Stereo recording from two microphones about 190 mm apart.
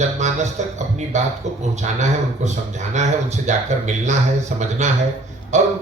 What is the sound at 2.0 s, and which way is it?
Speech, 40° right (ahead or behind).